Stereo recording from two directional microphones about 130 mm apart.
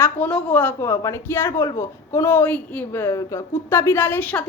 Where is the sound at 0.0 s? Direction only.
10° left (ahead or behind).